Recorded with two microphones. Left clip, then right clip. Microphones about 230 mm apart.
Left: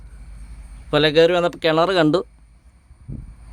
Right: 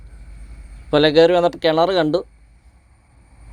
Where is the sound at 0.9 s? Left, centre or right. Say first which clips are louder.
Right 2 dB; centre.